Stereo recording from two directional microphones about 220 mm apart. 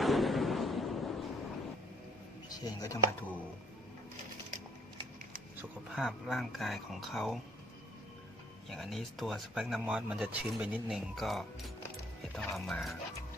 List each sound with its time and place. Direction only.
0.0 s a sound: centre (ahead or behind)
2.5 s speech: 15° left (ahead or behind)
5.9 s speech: centre (ahead or behind)
8.7 s speech: centre (ahead or behind)